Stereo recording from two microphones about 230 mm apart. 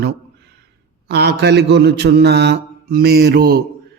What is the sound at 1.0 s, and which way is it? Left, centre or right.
A man's voice, right.